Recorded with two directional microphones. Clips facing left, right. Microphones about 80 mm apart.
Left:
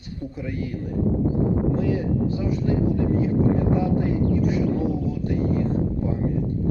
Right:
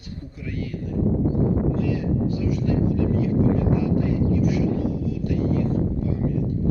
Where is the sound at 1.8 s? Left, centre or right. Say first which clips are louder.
Left 1 dB; left.